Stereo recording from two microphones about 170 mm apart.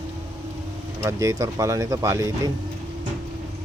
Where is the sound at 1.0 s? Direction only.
20° right (ahead or behind).